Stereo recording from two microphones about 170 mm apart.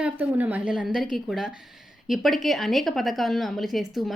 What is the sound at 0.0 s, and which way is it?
A woman's voice, 10° right (ahead or behind).